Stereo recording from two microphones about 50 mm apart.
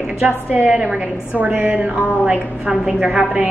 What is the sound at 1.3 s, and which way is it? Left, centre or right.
A woman's voice, right.